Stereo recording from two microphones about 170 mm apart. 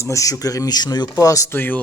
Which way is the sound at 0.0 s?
20° left (ahead or behind).